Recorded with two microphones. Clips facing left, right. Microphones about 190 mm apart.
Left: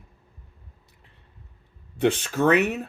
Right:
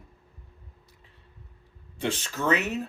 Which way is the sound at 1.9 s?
60° left (ahead or behind).